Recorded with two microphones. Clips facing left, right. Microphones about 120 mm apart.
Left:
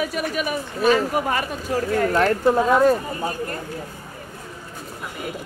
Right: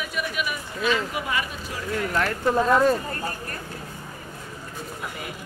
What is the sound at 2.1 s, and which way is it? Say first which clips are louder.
Speech: left 4 dB; 15° left (ahead or behind).